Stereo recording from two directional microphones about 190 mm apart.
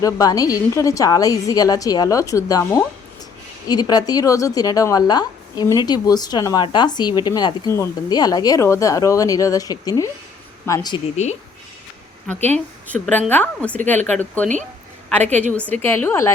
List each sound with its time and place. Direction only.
0.0 s speech: 20° left (ahead or behind)
11.2 s speech: 35° left (ahead or behind)
12.5 s a woman's voice: 10° left (ahead or behind)
15.7 s a woman's voice: 10° left (ahead or behind)